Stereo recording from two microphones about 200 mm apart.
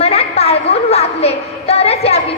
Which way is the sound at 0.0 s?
30° left (ahead or behind).